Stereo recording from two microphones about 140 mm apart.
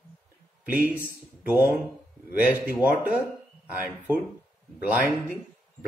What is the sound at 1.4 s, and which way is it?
Speech, 15° right (ahead or behind).